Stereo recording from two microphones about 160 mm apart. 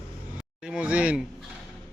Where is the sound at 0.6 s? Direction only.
5° right (ahead or behind).